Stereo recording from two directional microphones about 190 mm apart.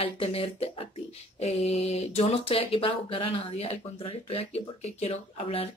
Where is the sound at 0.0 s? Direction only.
30° left (ahead or behind).